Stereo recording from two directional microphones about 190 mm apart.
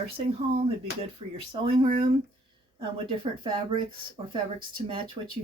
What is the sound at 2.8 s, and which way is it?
Speech, 25° right (ahead or behind).